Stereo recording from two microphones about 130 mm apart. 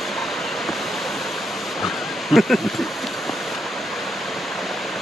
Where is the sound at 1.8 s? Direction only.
Centre (ahead or behind).